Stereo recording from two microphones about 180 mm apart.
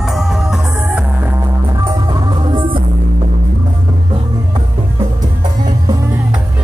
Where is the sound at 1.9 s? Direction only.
25° right (ahead or behind).